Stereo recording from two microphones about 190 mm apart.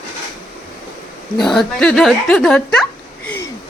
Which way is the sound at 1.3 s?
Centre (ahead or behind).